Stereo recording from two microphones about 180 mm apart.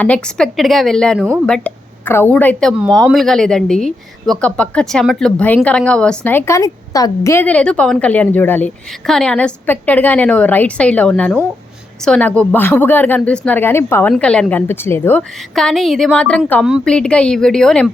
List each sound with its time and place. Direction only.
0.0 s a woman's voice: 5° left (ahead or behind)